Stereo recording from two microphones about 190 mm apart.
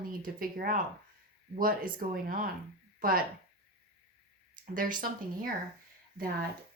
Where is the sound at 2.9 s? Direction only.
50° right (ahead or behind).